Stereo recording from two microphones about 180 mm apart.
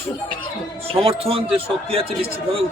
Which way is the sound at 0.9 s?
30° right (ahead or behind).